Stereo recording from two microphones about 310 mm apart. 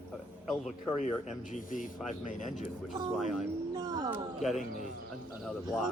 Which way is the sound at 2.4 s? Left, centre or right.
Centre.